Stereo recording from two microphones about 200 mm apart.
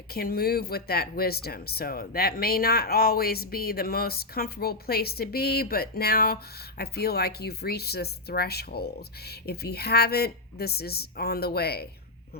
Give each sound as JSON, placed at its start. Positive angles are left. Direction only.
{"t": 0.1, "sound": "speech", "side_deg": 50}